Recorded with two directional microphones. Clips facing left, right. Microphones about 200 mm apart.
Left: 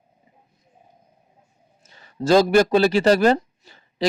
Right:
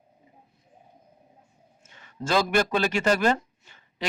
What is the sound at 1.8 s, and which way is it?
Speech, 35° left (ahead or behind).